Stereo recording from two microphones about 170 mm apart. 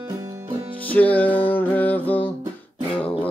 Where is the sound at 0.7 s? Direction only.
10° left (ahead or behind).